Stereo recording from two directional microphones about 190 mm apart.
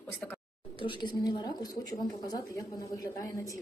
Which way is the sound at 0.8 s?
25° left (ahead or behind).